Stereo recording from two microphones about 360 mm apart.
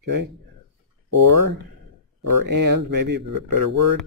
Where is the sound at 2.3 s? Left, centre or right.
Right.